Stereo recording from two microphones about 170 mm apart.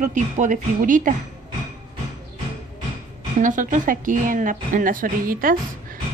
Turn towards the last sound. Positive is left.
turn(degrees=-55)  # may be behind; listen again after turning